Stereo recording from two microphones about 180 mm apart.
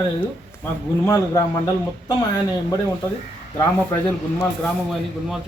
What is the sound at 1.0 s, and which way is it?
Speech, 20° left (ahead or behind).